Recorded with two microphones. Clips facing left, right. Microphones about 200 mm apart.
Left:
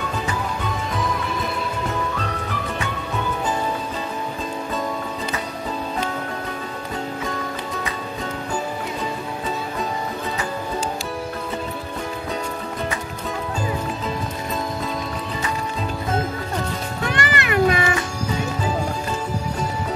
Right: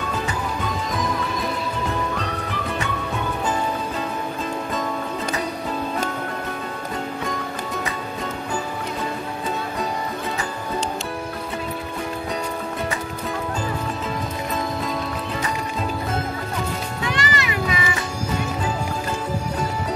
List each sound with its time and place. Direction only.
17.1 s music: 55° left (ahead or behind)